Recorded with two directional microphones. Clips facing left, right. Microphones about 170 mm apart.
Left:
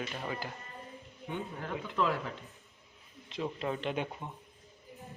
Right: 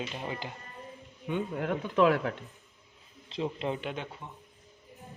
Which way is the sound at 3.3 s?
25° right (ahead or behind).